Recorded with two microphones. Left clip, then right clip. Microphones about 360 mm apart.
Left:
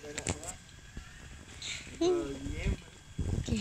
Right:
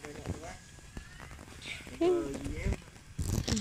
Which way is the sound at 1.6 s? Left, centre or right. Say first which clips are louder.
Even; centre.